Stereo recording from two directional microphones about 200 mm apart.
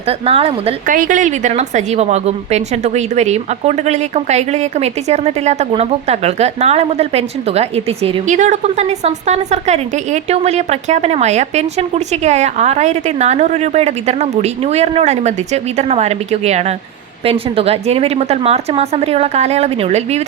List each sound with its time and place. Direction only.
0.0 s speech: 30° right (ahead or behind)
0.9 s a woman's voice: 40° right (ahead or behind)